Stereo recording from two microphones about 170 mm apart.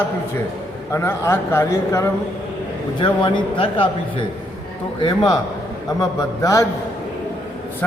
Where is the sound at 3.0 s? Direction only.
30° left (ahead or behind).